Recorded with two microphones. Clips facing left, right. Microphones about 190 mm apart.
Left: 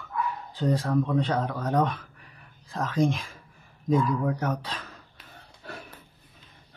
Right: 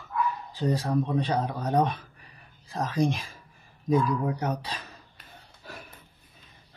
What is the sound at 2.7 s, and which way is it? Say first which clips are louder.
Speech: left 1 dB; 35° right (ahead or behind).